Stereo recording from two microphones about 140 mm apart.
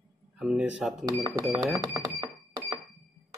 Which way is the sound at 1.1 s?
25° right (ahead or behind).